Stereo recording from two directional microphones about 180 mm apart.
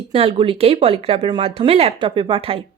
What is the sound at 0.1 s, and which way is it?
Speech, 30° right (ahead or behind).